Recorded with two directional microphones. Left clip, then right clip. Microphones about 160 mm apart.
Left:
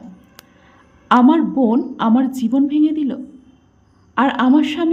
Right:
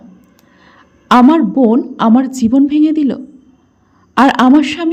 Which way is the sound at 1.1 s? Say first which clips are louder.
Right 5 dB; 30° right (ahead or behind).